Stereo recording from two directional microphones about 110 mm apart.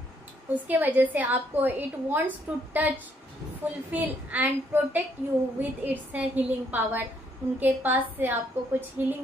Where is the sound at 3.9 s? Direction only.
15° right (ahead or behind).